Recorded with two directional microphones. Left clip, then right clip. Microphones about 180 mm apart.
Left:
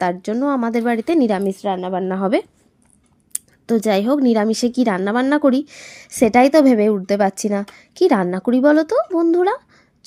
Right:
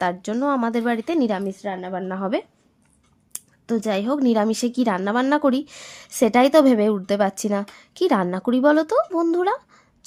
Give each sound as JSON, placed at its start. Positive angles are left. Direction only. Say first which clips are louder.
{"t": 0.0, "sound": "a woman's voice", "louder": "left 3 dB", "side_deg": 10}
{"t": 1.6, "sound": "a woman's voice", "louder": "left 7 dB", "side_deg": 30}
{"t": 3.7, "sound": "a woman's voice", "louder": "left 6 dB", "side_deg": 25}